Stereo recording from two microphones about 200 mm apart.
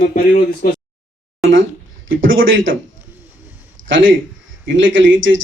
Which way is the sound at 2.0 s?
75° right (ahead or behind).